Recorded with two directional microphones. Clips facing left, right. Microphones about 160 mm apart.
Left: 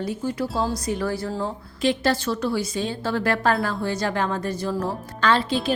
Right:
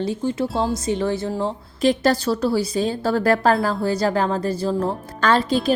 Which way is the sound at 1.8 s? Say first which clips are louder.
Right 4 dB; 40° right (ahead or behind).